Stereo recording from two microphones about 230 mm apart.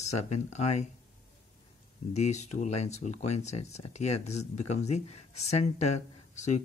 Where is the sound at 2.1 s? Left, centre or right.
Left.